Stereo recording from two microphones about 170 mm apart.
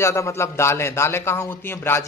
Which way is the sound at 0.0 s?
15° left (ahead or behind).